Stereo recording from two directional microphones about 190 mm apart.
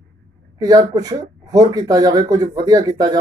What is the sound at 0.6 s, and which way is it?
Speech, 20° right (ahead or behind).